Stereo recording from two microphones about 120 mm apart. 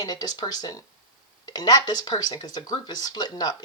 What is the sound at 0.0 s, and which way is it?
Speech, 30° left (ahead or behind).